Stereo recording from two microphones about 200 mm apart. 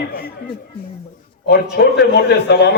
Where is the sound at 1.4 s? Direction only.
55° left (ahead or behind).